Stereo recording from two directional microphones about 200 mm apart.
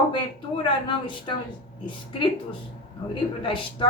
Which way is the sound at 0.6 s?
25° left (ahead or behind).